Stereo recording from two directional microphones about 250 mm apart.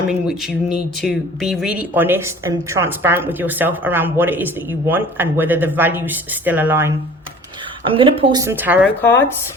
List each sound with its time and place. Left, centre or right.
0.1 s speech: centre
7.9 s speech: right
9.0 s speech: centre